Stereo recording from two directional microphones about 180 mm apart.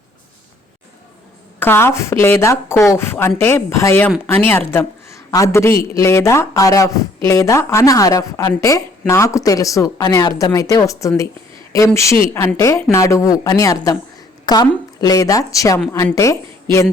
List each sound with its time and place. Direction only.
1.5 s speech: 10° left (ahead or behind)
12.3 s a woman's voice: 15° left (ahead or behind)